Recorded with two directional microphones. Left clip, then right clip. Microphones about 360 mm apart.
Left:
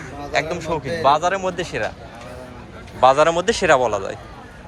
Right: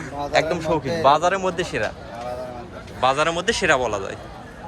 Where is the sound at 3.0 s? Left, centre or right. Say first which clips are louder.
Left 6 dB; centre.